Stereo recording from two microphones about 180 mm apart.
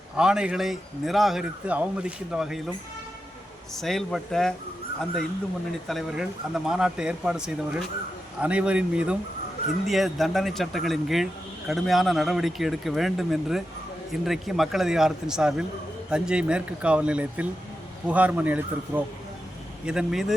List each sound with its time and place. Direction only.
0.2 s speech: 5° right (ahead or behind)
3.8 s speech: centre (ahead or behind)
5.9 s speech: centre (ahead or behind)